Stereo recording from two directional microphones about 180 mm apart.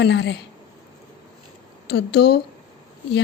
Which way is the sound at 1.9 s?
65° left (ahead or behind).